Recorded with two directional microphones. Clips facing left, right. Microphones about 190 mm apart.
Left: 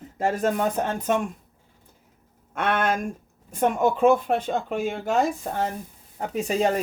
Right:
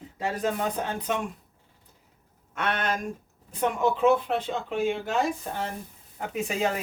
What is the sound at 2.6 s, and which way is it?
Speech, 55° left (ahead or behind).